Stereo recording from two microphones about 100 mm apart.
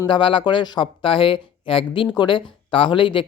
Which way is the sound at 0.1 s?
55° left (ahead or behind).